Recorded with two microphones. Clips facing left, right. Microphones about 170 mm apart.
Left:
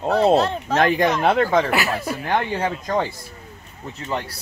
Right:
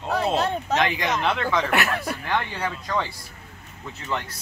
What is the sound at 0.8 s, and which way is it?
Speech, 50° left (ahead or behind).